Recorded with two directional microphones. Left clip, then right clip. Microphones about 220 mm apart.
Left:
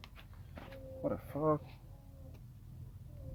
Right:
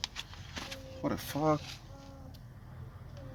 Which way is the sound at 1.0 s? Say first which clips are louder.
Right 3 dB; 5° right (ahead or behind).